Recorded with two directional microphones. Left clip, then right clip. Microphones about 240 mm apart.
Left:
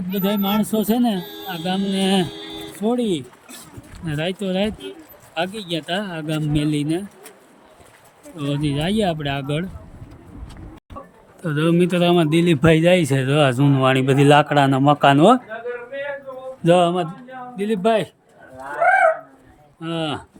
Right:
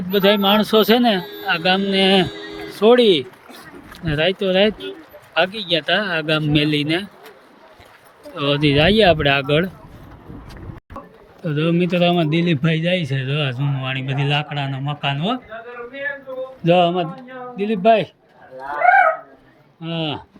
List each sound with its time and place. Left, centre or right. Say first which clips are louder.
0.1 s speech: right 8 dB; centre
8.4 s speech: right 8 dB; centre
11.4 s speech: left 1 dB; centre
16.6 s speech: even; centre
19.8 s speech: even; centre